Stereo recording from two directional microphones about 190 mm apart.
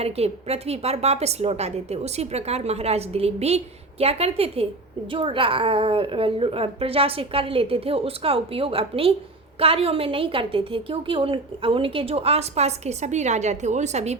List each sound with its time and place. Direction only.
0.0 s a woman's voice: 35° right (ahead or behind)